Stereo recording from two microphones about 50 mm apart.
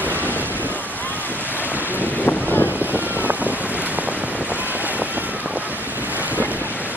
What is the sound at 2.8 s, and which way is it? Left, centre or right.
Boat, right.